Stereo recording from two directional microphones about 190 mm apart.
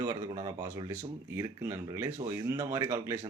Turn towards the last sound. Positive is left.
turn(degrees=-15)  # may be behind; listen again after turning